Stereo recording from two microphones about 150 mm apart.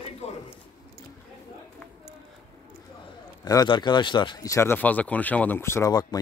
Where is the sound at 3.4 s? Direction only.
25° left (ahead or behind).